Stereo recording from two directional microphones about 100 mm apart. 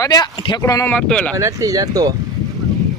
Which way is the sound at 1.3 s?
35° right (ahead or behind).